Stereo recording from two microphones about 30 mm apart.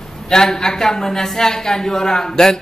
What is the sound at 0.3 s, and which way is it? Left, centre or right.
Speech, centre.